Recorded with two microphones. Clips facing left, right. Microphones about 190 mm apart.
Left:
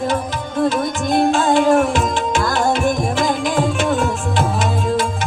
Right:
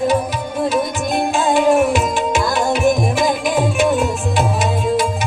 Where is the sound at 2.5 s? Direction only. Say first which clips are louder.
Right 2 dB; 10° right (ahead or behind).